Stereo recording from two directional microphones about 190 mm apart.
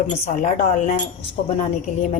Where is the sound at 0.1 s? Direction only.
40° left (ahead or behind).